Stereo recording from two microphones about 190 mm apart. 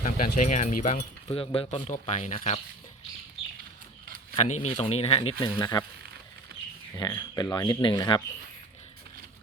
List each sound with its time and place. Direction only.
0.0 s speech: 45° left (ahead or behind)
1.3 s speech: 30° left (ahead or behind)
4.4 s speech: 35° left (ahead or behind)
5.5 s speech: 20° left (ahead or behind)
6.9 s speech: 20° left (ahead or behind)